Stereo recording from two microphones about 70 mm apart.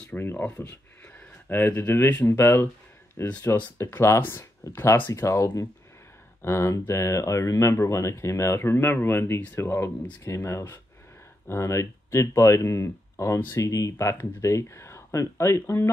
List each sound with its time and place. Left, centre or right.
0.2 s speech: left
0.5 s a sound: left
2.0 s speech: left
2.2 s speech: left
5.1 s speech: left